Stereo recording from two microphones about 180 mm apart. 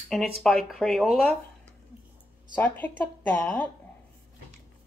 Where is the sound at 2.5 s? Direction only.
10° left (ahead or behind).